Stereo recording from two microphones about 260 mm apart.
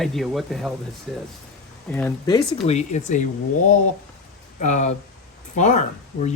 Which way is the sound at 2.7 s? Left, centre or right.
Left.